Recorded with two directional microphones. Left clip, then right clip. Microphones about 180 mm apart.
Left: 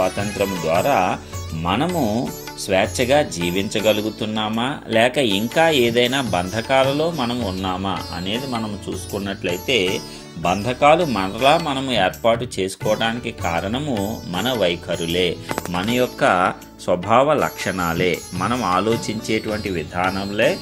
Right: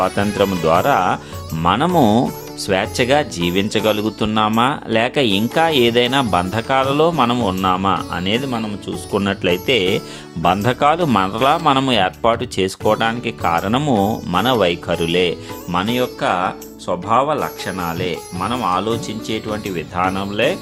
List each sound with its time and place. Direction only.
0.0 s speech: 30° right (ahead or behind)
16.2 s speech: 10° left (ahead or behind)
20.1 s speech: 15° right (ahead or behind)